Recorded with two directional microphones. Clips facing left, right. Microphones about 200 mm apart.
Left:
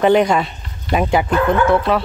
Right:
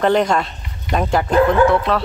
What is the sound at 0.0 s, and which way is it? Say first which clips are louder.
Speech: left 2 dB; 5° left (ahead or behind).